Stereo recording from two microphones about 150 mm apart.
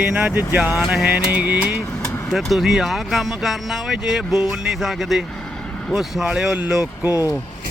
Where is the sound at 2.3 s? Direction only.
Centre (ahead or behind).